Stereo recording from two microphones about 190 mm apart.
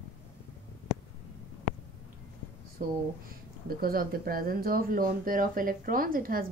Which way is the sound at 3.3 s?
50° right (ahead or behind).